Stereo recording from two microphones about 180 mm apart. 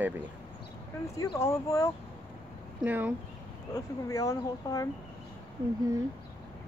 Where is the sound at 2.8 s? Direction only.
10° right (ahead or behind).